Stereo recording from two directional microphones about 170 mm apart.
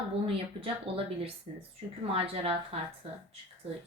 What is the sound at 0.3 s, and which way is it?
Speech, 35° right (ahead or behind).